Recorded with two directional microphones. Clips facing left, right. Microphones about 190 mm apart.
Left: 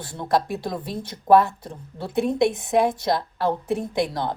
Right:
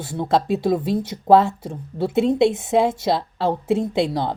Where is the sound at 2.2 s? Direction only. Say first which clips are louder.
Right 3 dB; 25° right (ahead or behind).